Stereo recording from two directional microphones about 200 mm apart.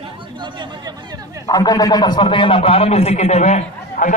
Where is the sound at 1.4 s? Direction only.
15° left (ahead or behind); by 4.1 s 35° left (ahead or behind).